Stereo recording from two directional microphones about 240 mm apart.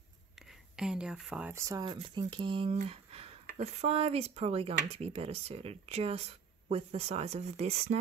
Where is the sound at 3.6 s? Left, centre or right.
Right.